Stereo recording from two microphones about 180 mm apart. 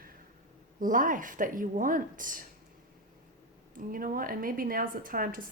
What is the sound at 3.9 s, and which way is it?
Speech, 50° right (ahead or behind).